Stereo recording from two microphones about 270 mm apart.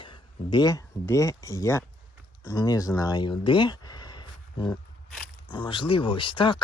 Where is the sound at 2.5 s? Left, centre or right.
Centre.